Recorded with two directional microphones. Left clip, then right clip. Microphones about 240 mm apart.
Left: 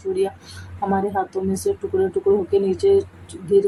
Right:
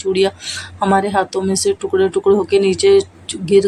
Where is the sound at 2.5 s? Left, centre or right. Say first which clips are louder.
Right 5 dB; centre.